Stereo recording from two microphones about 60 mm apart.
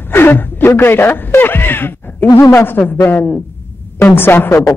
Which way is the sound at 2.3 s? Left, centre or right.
Left.